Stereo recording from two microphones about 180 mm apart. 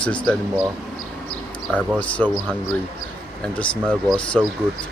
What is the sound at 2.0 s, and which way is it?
Speech, 5° left (ahead or behind).